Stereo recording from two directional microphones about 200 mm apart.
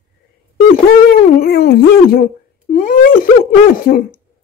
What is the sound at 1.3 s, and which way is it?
Speech, 50° left (ahead or behind).